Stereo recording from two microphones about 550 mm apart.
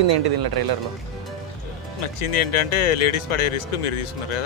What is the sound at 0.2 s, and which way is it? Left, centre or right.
Speech, right.